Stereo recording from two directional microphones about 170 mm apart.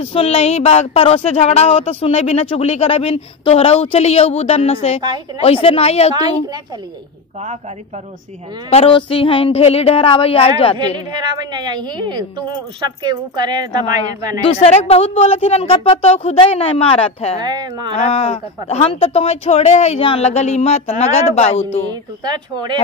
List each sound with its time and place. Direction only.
0.0 s speech: 35° left (ahead or behind)
8.6 s speech: 35° left (ahead or behind)
11.1 s a woman's voice: 25° right (ahead or behind)
14.4 s speech: 35° left (ahead or behind)
17.4 s a woman's voice: 25° right (ahead or behind)
17.9 s speech: 35° left (ahead or behind)
22.2 s a woman's voice: 25° right (ahead or behind)